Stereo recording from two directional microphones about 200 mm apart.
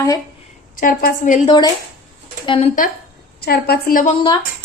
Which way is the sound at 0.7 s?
40° left (ahead or behind).